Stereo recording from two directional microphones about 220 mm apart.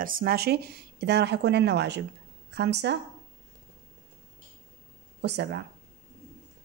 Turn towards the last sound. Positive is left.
turn(degrees=-50)  # may be behind; listen again after turning